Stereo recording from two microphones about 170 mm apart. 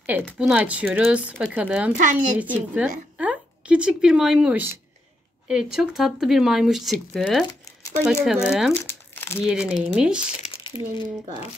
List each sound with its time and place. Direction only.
0.3 s a woman's voice: 5° right (ahead or behind)
8.8 s crumpling: 15° left (ahead or behind)
9.4 s speech: 5° right (ahead or behind)
10.4 s crumpling: 30° left (ahead or behind)